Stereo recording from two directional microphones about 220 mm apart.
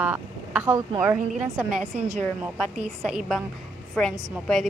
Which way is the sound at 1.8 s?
30° right (ahead or behind).